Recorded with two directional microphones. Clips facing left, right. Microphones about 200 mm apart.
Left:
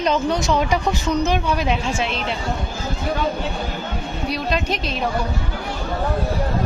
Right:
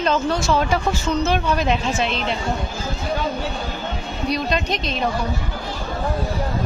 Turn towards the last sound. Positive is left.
turn(degrees=5)  # may be behind; listen again after turning